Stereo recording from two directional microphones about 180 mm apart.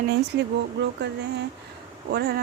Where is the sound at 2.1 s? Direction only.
60° right (ahead or behind).